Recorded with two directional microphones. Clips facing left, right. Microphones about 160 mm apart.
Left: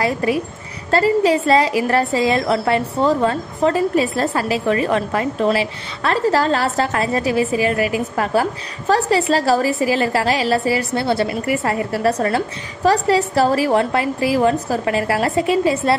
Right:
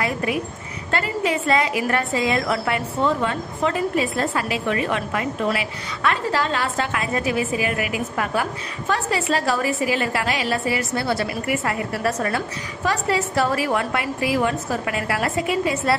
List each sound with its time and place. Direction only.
0.0 s a woman's voice: 30° left (ahead or behind)